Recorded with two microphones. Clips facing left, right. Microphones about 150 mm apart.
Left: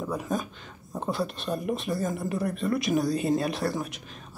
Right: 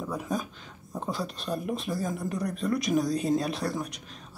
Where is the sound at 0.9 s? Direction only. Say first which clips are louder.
Left 3 dB; centre (ahead or behind).